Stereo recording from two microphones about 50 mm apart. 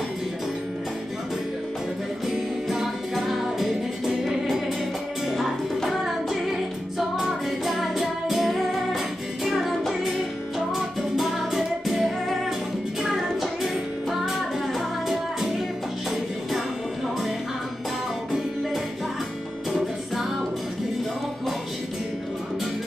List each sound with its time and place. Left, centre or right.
2.2 s music: centre
14.7 s music: centre